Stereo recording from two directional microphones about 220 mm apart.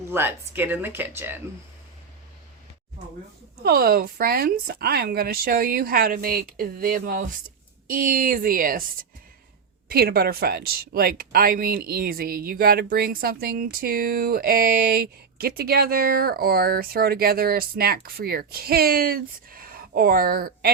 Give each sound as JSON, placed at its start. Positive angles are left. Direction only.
{"t": 0.0, "sound": "speech", "side_deg": -10}
{"t": 3.6, "sound": "speech", "side_deg": -45}
{"t": 9.9, "sound": "speech", "side_deg": -45}